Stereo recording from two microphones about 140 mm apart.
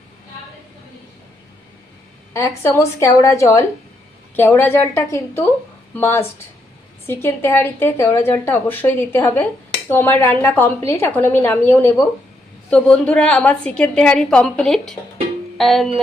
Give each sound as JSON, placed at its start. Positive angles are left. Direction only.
{"t": 2.3, "sound": "a woman's voice", "side_deg": 20}
{"t": 15.5, "sound": "music", "side_deg": 0}